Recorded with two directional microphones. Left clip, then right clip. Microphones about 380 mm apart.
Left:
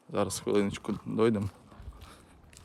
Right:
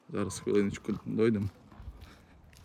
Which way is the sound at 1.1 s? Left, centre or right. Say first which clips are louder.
Left 2 dB; centre.